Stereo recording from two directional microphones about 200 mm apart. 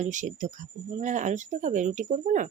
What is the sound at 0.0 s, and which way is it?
Speech, 40° right (ahead or behind).